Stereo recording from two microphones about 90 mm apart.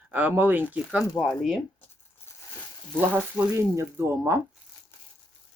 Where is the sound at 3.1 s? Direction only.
20° right (ahead or behind).